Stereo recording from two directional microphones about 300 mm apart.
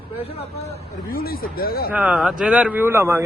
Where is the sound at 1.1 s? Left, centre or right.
Left.